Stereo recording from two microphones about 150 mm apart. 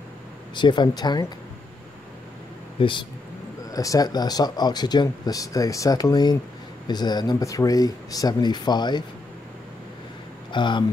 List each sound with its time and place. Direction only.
0.6 s speech: 30° left (ahead or behind)
2.8 s speech: 35° left (ahead or behind)
3.7 s speech: 25° left (ahead or behind)
10.5 s speech: 30° left (ahead or behind)